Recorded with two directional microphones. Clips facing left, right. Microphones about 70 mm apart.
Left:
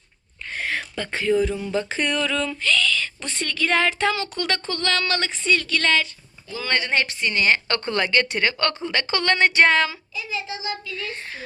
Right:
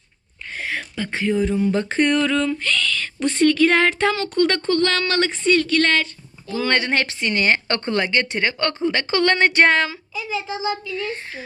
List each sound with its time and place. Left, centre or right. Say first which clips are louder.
0.5 s speech: even; centre; by 1.7 s right
1.7 s speech: right 5 dB; right
2.6 s owl: left 1 dB; right
7.3 s speech: right 1 dB; right
7.9 s speech: even; right
10.9 s a child's voice: right 5 dB; right